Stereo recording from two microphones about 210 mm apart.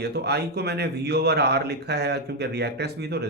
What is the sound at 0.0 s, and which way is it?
Speech, 50° right (ahead or behind).